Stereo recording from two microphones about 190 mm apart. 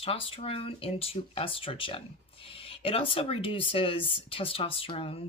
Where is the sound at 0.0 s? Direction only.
30° left (ahead or behind).